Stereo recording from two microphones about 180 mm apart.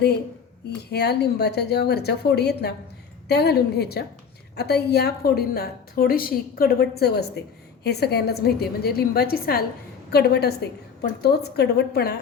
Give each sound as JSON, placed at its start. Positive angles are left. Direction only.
{"t": 0.9, "sound": "a woman's voice", "side_deg": 65}